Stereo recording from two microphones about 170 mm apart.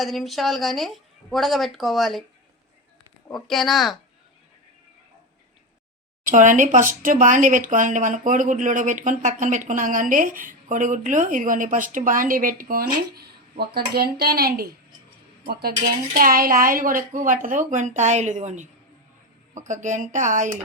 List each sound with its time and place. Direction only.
0.0 s a woman's voice: centre (ahead or behind)
3.3 s a woman's voice: centre (ahead or behind)
6.2 s speech: 50° right (ahead or behind)